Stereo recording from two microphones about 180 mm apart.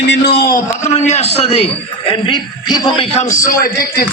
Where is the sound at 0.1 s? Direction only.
65° left (ahead or behind); by 1.6 s 35° left (ahead or behind).